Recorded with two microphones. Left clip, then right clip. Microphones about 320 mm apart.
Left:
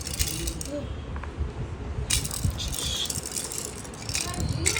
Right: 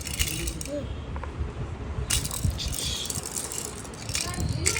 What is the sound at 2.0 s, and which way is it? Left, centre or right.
Crushing, centre.